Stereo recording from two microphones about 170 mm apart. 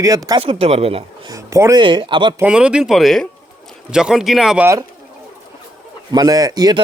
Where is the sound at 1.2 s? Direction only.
20° right (ahead or behind).